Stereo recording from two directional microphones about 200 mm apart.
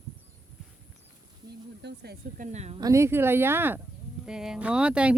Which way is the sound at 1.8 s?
55° right (ahead or behind).